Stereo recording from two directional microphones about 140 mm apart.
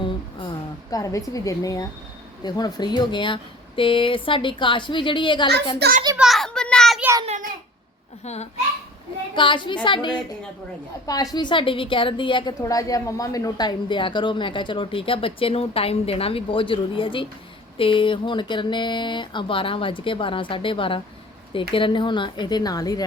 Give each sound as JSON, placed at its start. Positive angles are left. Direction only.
{"t": 0.9, "sound": "a woman's voice", "side_deg": 25}
{"t": 6.1, "sound": "a sound", "side_deg": 0}
{"t": 8.2, "sound": "a child's voice", "side_deg": 50}
{"t": 9.3, "sound": "a woman's voice", "side_deg": 35}
{"t": 12.6, "sound": "a woman's voice", "side_deg": 25}